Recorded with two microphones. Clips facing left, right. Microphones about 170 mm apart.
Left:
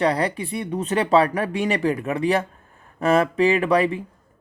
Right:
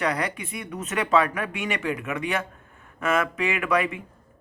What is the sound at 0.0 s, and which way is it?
Speech, 30° left (ahead or behind).